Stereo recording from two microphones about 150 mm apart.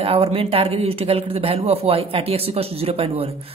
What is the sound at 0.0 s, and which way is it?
Speech, 40° right (ahead or behind).